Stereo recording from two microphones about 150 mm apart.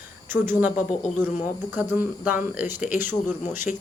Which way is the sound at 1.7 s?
15° right (ahead or behind).